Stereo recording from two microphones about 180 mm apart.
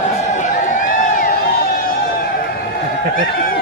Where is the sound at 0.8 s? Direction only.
45° left (ahead or behind).